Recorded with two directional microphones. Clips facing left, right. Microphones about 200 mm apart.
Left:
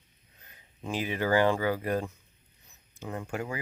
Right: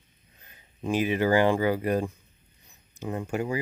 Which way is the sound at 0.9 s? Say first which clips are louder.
Right 5 dB; 15° right (ahead or behind).